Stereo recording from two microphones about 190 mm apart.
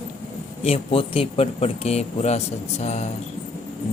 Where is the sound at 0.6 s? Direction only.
30° left (ahead or behind).